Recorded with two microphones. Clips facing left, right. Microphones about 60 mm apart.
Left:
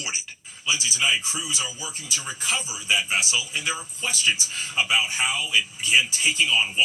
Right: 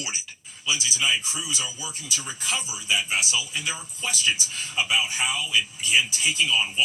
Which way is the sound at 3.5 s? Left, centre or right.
Left.